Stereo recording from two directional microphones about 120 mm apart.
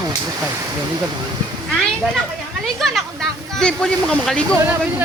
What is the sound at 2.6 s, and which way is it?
Speech, 5° left (ahead or behind).